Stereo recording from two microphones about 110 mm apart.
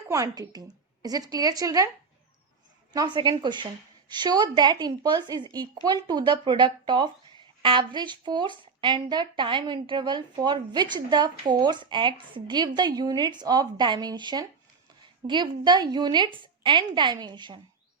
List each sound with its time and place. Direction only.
0.1 s speech: 30° right (ahead or behind)
2.9 s a woman's voice: 40° right (ahead or behind)